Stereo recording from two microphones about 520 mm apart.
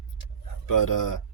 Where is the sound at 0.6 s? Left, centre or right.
Left.